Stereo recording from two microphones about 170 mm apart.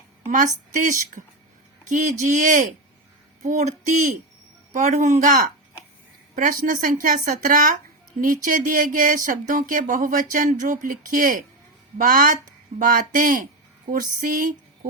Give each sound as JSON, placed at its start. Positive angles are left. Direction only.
{"t": 0.3, "sound": "speech", "side_deg": -50}